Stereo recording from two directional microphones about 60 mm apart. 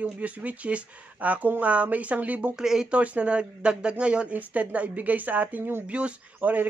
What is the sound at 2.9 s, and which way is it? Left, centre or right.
A man's voice, right.